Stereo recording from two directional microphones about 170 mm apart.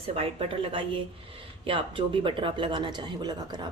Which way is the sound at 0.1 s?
35° right (ahead or behind).